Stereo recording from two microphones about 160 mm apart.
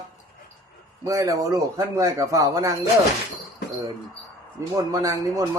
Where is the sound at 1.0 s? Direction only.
20° right (ahead or behind).